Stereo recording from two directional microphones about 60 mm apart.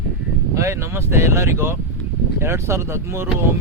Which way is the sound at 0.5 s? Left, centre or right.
Right.